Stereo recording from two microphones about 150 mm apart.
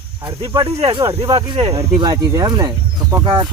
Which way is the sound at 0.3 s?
35° right (ahead or behind).